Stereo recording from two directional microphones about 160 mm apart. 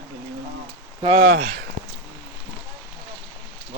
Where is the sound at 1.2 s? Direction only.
65° right (ahead or behind).